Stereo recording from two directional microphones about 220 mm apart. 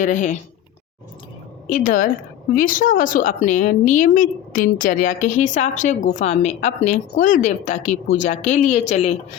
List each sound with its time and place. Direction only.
0.0 s a woman's voice: 35° left (ahead or behind)
1.7 s a woman's voice: 40° left (ahead or behind)